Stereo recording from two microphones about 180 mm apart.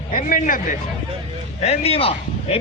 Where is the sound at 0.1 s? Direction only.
50° left (ahead or behind).